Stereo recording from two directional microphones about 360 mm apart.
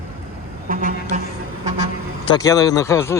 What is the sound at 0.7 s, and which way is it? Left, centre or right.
Speech, right.